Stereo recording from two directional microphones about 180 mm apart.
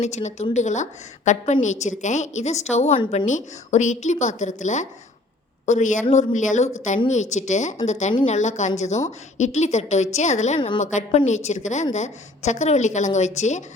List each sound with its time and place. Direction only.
0.0 s a woman's voice: 40° left (ahead or behind)